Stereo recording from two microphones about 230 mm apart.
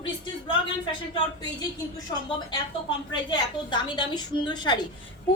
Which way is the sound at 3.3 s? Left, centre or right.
Centre.